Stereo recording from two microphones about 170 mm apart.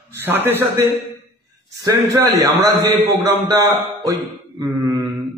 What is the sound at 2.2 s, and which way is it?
A man's voice, 20° right (ahead or behind).